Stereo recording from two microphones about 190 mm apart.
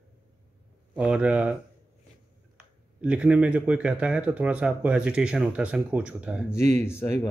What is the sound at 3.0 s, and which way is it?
Speech, 5° right (ahead or behind).